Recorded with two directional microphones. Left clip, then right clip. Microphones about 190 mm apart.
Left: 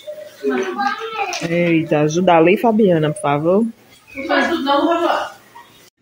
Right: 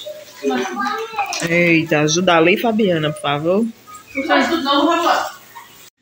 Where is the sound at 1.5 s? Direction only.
15° left (ahead or behind).